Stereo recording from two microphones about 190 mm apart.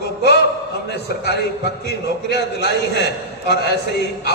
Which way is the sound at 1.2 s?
60° left (ahead or behind).